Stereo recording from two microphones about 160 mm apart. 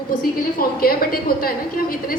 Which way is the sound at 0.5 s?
70° left (ahead or behind).